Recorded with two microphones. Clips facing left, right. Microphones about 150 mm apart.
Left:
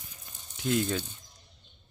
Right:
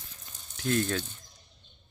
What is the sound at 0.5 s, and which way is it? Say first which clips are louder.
Speech: even; 15° left (ahead or behind).